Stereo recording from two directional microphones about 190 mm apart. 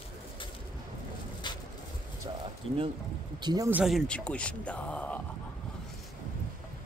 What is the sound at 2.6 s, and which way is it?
Speech, 30° right (ahead or behind).